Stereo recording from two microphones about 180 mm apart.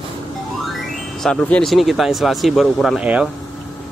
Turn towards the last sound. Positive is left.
turn(degrees=-5)  # may be behind; listen again after turning